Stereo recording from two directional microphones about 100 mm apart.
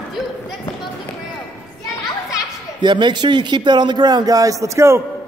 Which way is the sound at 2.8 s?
50° right (ahead or behind).